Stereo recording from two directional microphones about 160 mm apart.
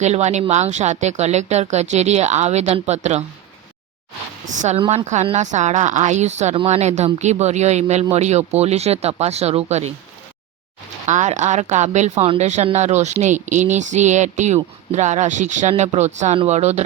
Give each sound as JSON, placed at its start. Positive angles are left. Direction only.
{"t": 0.0, "sound": "speech", "side_deg": -45}
{"t": 4.9, "sound": "speech", "side_deg": -45}
{"t": 11.0, "sound": "speech", "side_deg": -50}